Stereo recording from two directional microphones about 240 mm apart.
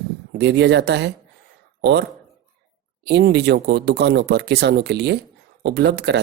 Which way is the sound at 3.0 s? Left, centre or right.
Right.